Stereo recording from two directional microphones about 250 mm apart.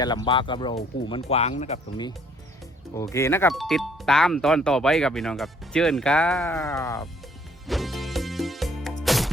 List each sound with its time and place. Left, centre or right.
0.0 s speech: centre
7.7 s music: centre